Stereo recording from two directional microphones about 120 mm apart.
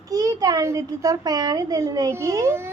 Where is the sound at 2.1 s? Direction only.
25° right (ahead or behind).